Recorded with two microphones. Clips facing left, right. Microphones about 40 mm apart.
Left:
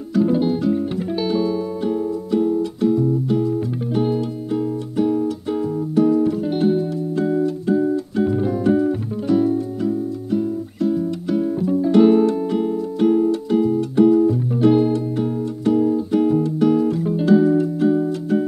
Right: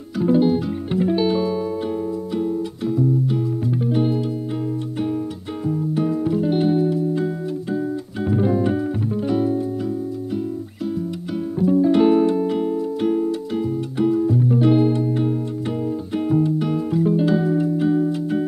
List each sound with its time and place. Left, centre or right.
0.2 s music: centre
5.7 s music: centre
11.5 s music: centre